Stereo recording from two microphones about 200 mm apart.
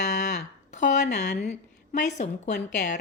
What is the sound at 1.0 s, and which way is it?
Speech, 55° left (ahead or behind).